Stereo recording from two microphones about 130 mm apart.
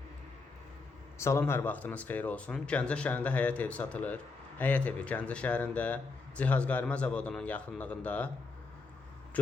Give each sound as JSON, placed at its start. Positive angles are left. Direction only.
{"t": 1.2, "sound": "speech", "side_deg": 20}